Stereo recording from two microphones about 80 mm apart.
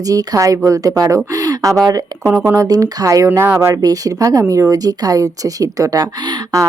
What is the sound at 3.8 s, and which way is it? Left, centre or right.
Speech, right.